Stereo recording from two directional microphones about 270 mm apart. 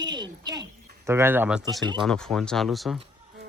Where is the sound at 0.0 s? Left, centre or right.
Centre.